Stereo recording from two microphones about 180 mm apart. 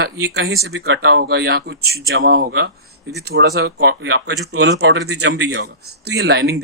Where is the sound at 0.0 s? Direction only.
70° right (ahead or behind).